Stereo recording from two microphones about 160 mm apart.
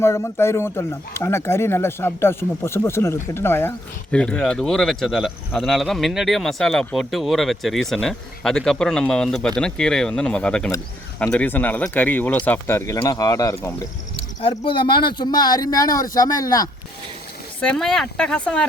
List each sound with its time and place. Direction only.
0.0 s speech: 15° left (ahead or behind)
14.4 s a man's voice: 35° left (ahead or behind)
17.6 s speech: 5° left (ahead or behind)